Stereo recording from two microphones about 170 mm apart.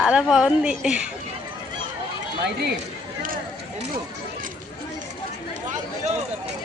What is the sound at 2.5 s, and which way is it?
Speech, 75° right (ahead or behind).